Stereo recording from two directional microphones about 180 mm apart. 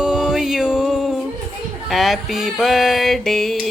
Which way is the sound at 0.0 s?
5° right (ahead or behind).